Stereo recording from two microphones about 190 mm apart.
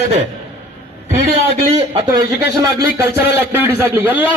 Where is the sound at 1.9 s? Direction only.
25° right (ahead or behind).